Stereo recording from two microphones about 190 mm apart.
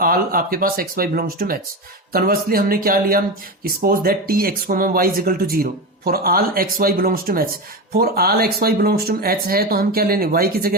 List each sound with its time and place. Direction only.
0.0 s speech: 50° right (ahead or behind)